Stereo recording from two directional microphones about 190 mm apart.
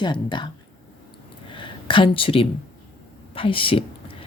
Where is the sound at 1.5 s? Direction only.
25° left (ahead or behind).